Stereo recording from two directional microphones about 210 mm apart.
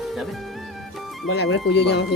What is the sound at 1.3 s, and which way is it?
Speech, 60° left (ahead or behind).